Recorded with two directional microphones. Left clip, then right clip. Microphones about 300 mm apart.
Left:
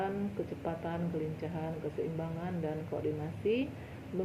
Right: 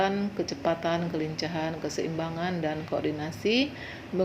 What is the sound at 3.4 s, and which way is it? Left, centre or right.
Speech, right.